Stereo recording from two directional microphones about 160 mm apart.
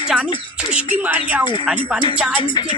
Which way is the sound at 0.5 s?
5° right (ahead or behind).